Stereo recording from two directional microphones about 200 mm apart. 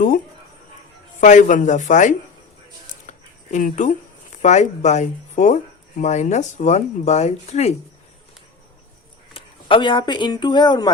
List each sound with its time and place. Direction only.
1.2 s speech: 40° left (ahead or behind)
9.3 s speech: 25° left (ahead or behind)